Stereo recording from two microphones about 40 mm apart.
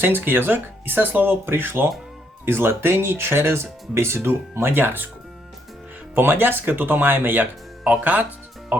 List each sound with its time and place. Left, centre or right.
0.0 s speech: right
6.1 s speech: right
7.9 s speech: right